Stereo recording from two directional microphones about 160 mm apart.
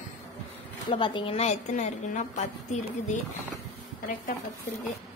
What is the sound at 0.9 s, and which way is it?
A woman's voice, 30° left (ahead or behind).